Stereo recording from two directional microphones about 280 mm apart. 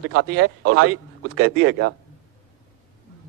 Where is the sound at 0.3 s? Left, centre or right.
Right.